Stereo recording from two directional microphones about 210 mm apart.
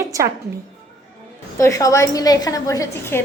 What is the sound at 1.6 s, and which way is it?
A woman's voice, 15° left (ahead or behind).